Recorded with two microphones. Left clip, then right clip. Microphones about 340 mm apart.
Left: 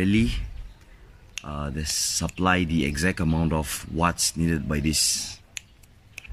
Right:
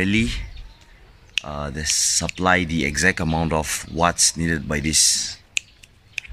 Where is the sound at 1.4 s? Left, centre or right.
Centre.